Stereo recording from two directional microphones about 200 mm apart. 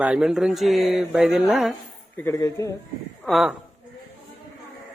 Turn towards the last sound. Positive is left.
turn(degrees=0)  # may be behind; listen again after turning